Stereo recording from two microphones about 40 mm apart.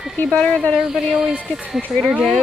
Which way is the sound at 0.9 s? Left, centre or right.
Centre.